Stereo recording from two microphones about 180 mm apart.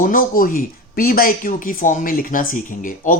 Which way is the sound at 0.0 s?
50° left (ahead or behind).